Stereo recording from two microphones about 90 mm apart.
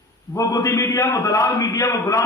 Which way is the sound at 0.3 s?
40° left (ahead or behind).